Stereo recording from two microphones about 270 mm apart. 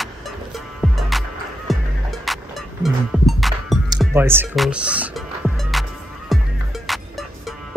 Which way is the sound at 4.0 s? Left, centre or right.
Centre.